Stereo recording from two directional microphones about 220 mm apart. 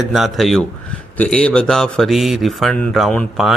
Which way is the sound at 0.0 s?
Centre (ahead or behind).